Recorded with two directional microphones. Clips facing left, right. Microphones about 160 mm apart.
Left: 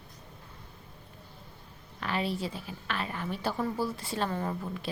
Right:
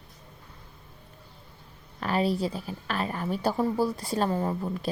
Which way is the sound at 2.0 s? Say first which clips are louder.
Right 6 dB; 40° right (ahead or behind).